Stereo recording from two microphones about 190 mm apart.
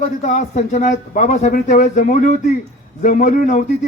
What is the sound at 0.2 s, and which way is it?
A man's voice, 40° left (ahead or behind).